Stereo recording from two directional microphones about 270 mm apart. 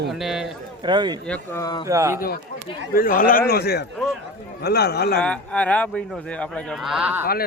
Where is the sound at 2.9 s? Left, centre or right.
Left.